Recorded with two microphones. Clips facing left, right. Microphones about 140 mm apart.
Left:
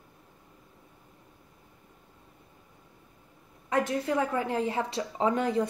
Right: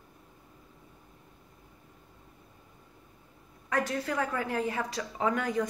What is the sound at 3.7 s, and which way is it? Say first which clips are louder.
A woman's voice: left 3 dB; 20° left (ahead or behind).